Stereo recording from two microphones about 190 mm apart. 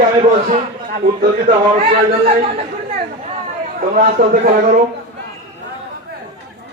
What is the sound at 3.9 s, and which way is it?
Speech, 50° right (ahead or behind).